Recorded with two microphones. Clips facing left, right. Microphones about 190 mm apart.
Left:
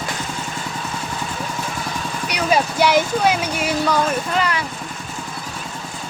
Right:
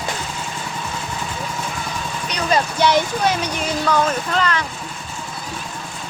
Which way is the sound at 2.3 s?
10° left (ahead or behind).